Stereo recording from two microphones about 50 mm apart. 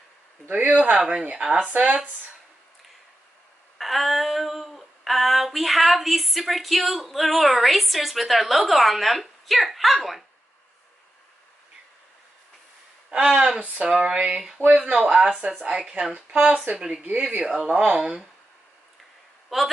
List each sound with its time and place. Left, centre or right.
0.7 s speech: right
0.9 s speech: centre
1.6 s speech: right
3.7 s a sound: centre
13.1 s speech: right
17.0 s speech: right
17.5 s speech: centre
19.5 s speech: centre